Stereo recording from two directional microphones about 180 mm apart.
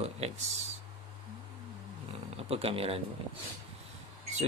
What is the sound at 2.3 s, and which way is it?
Speech, 35° right (ahead or behind).